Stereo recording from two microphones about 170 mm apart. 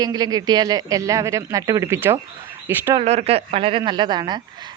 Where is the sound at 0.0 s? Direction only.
25° right (ahead or behind).